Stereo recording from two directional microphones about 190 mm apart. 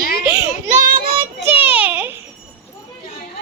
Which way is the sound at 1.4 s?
10° right (ahead or behind).